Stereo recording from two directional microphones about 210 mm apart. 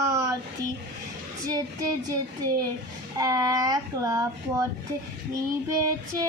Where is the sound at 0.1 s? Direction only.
15° right (ahead or behind).